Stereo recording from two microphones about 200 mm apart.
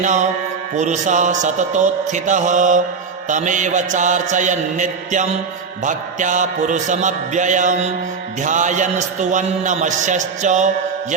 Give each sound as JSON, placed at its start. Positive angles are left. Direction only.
{"t": 0.0, "sound": "a man's voice", "side_deg": -35}